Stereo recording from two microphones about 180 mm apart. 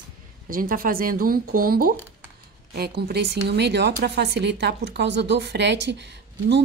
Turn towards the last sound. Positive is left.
turn(degrees=-70)  # may be behind; listen again after turning